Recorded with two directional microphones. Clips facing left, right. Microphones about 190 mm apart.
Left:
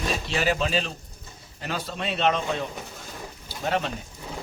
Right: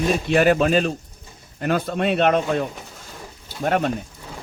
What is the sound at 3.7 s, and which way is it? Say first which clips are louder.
Speech: right 6 dB; 50° right (ahead or behind).